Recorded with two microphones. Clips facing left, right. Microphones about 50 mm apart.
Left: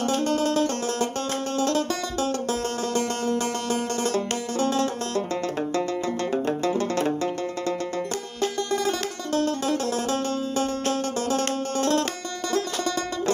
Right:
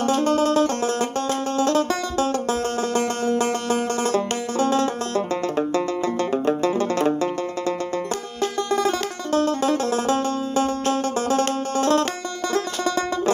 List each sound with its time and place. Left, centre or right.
0.0 s banjo: right
1.6 s music: right
4.0 s banjo: right
5.6 s music: centre
8.7 s music: right